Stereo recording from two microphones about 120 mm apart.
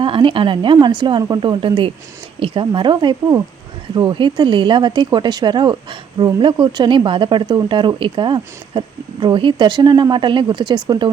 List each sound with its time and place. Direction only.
0.0 s a woman's voice: 45° right (ahead or behind)